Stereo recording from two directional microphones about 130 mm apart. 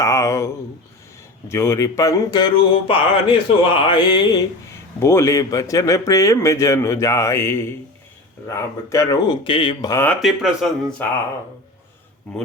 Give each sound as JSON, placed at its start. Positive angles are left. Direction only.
{"t": 0.0, "sound": "a sound", "side_deg": 25}
{"t": 1.5, "sound": "speech", "side_deg": 20}
{"t": 4.9, "sound": "speech", "side_deg": 20}
{"t": 9.3, "sound": "speech", "side_deg": 40}
{"t": 10.2, "sound": "speech", "side_deg": 0}